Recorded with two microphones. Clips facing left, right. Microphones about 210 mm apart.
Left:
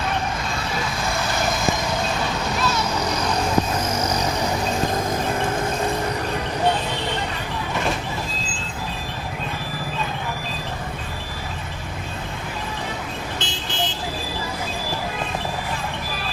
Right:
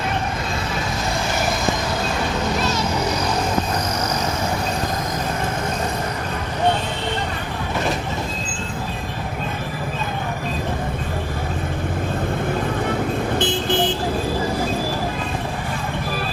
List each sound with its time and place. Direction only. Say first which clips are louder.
13.4 s vehicle: right 10 dB; 55° right (ahead or behind)